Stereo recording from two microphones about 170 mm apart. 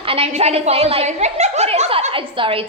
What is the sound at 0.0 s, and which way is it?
A woman's voice, 35° right (ahead or behind).